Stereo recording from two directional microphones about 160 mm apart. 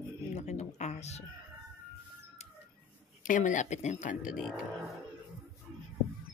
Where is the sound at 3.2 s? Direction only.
55° left (ahead or behind).